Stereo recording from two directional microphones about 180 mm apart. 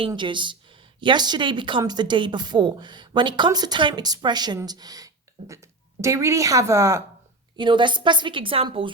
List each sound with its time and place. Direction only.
0.1 s a woman's voice: 25° right (ahead or behind)
7.5 s speech: 25° right (ahead or behind)